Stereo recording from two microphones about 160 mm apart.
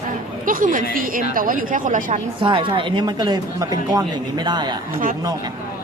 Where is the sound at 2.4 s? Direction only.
30° right (ahead or behind).